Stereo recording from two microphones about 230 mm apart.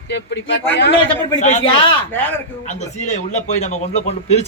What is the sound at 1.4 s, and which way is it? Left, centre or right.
Speech, left.